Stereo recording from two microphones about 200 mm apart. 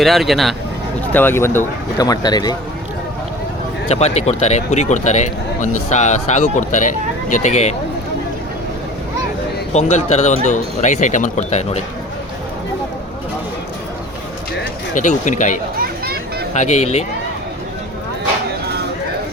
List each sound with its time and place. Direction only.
0.0 s speech: centre (ahead or behind)
1.1 s speech: 10° left (ahead or behind)
3.8 s speech: 30° left (ahead or behind)
9.7 s speech: 35° left (ahead or behind)
14.9 s speech: 40° left (ahead or behind)
16.6 s speech: 35° left (ahead or behind)